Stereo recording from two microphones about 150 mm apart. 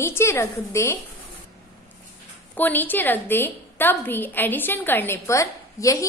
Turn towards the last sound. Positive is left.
turn(degrees=20)  # may be behind; listen again after turning